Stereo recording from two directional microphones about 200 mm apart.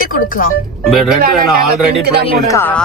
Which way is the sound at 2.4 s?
15° left (ahead or behind).